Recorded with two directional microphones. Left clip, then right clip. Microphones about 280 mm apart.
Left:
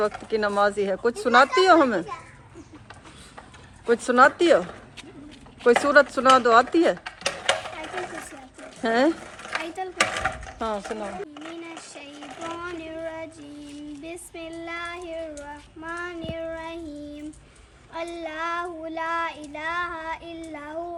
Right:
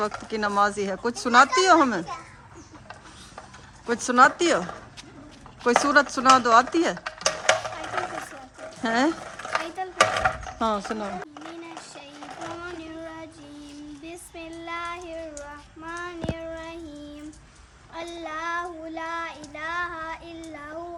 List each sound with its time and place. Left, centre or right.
0.0 s speech: centre
3.8 s speech: centre
5.6 s speech: centre
7.2 s a sound: right
8.8 s speech: centre
9.8 s a sound: centre
14.0 s child singing: centre
17.9 s child singing: centre